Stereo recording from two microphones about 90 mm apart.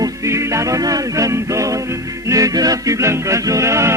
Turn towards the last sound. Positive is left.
turn(degrees=-35)  # may be behind; listen again after turning